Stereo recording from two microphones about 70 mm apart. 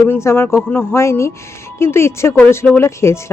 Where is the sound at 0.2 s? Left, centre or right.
Left.